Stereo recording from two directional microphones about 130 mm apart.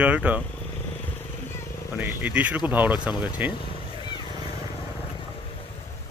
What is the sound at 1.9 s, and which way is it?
Speech, 10° right (ahead or behind).